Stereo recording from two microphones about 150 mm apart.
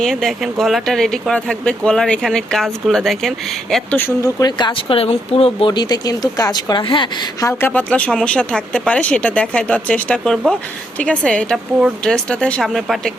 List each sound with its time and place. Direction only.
0.0 s speech: centre (ahead or behind)
4.2 s speech: 25° left (ahead or behind)
7.4 s speech: 10° left (ahead or behind)